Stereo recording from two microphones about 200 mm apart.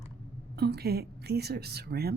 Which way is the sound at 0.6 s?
55° right (ahead or behind).